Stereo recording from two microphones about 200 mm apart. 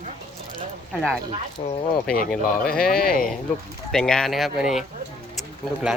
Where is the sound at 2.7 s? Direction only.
5° left (ahead or behind).